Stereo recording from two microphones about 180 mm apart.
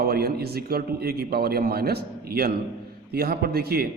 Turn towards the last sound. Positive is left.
turn(degrees=-60)  # may be behind; listen again after turning